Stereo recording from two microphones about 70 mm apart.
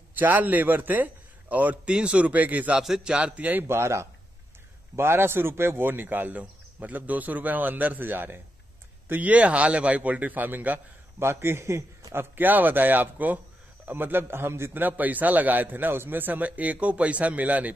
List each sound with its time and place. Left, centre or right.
0.1 s a man's voice: right
2.8 s a man's voice: centre
3.6 s a man's voice: right
11.2 s a man's voice: right